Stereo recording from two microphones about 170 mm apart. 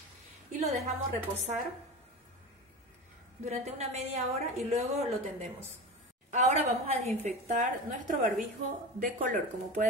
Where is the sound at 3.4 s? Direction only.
40° right (ahead or behind).